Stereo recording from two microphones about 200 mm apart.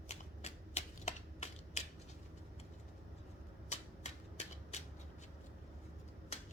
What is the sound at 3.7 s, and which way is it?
Typewriter, 35° left (ahead or behind).